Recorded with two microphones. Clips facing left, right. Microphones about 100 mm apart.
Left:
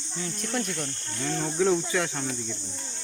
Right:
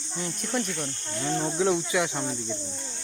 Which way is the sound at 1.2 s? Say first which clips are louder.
Even; 20° right (ahead or behind).